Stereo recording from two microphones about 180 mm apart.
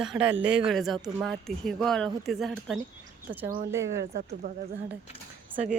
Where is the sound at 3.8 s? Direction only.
80° right; by 4.5 s 65° right (ahead or behind).